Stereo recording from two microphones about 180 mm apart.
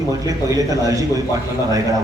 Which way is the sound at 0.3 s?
20° right (ahead or behind).